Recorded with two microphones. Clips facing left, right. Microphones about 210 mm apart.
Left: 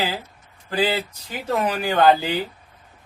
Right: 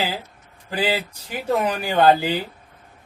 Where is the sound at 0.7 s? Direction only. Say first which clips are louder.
Left 1 dB; 15° right (ahead or behind).